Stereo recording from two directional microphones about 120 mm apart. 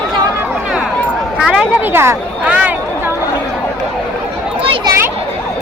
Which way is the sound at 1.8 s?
20° right (ahead or behind).